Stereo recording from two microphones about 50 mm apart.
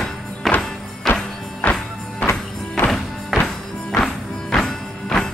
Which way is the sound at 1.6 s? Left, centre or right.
Left.